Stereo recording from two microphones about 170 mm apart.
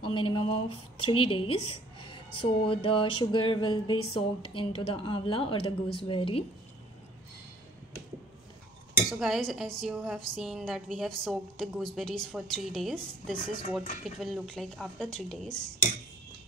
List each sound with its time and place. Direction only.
0.0 s speech: 30° left (ahead or behind)
9.1 s a woman's voice: centre (ahead or behind)